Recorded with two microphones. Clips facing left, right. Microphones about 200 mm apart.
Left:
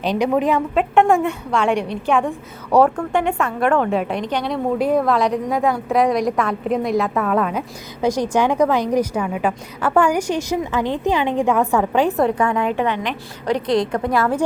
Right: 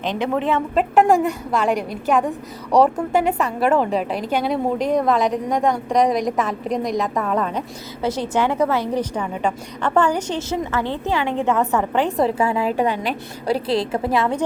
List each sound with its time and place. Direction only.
0.2 s a woman's voice: 15° left (ahead or behind)
0.7 s a woman's voice: centre (ahead or behind)
4.8 s a woman's voice: 5° left (ahead or behind)
12.2 s a woman's voice: 5° right (ahead or behind)
12.5 s a woman's voice: 35° right (ahead or behind)
13.9 s a woman's voice: 5° right (ahead or behind)